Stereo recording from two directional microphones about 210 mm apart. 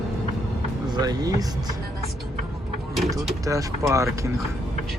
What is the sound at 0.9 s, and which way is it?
Vehicle, 20° right (ahead or behind).